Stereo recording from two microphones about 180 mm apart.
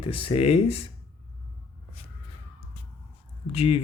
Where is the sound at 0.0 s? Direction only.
30° left (ahead or behind).